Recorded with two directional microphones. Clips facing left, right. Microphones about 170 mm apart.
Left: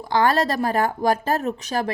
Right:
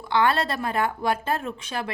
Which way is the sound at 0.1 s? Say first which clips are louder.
Left 3 dB; 40° left (ahead or behind).